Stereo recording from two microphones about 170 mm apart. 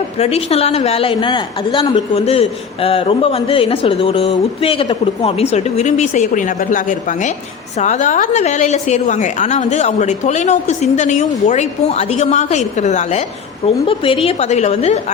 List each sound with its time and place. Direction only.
0.2 s a woman's voice: 35° left (ahead or behind)
13.8 s a woman's voice: 30° left (ahead or behind)